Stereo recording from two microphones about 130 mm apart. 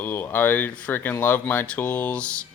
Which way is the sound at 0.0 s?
15° left (ahead or behind).